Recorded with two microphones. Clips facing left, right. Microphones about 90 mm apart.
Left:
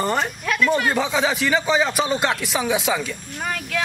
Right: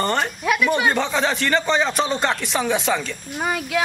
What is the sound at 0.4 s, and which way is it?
A man's voice, 10° right (ahead or behind).